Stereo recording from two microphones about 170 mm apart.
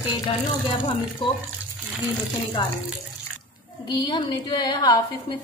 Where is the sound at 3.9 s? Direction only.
25° left (ahead or behind).